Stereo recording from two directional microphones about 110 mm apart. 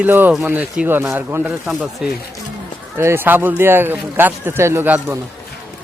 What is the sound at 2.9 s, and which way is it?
Speech, 20° right (ahead or behind).